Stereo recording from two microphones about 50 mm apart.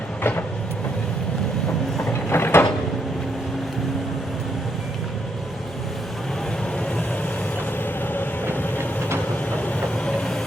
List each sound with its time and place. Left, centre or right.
0.2 s vehicle: left
2.3 s a sound: left
8.1 s vehicle: left
10.1 s vehicle: centre